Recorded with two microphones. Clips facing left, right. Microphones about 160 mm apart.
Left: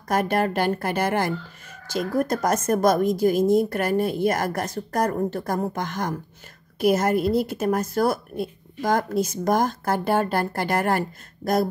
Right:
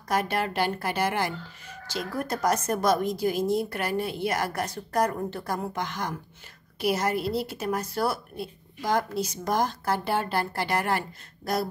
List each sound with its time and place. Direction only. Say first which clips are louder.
0.1 s speech: left 5 dB; 50° left (ahead or behind)